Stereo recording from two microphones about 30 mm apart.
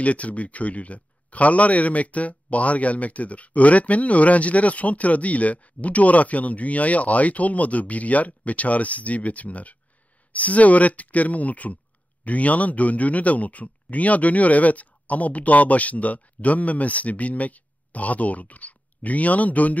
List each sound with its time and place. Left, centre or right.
0.0 s speech: left